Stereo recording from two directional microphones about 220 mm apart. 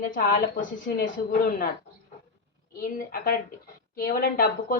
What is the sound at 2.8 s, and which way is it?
A woman's voice, 40° left (ahead or behind).